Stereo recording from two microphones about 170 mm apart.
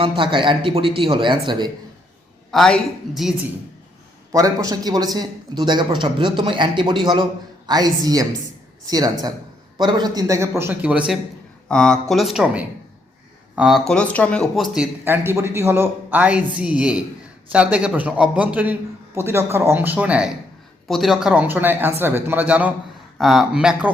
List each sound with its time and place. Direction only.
0.0 s a man's voice: 30° right (ahead or behind)
2.5 s speech: 5° left (ahead or behind)
4.3 s a man's voice: 20° right (ahead or behind)
11.7 s speech: 5° left (ahead or behind)
15.0 s a man's voice: 15° right (ahead or behind)